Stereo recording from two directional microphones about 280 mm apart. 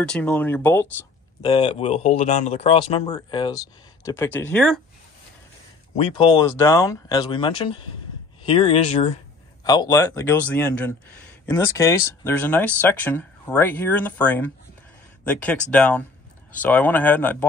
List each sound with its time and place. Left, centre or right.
0.0 s speech: centre
1.4 s speech: centre
5.9 s speech: centre
9.7 s speech: centre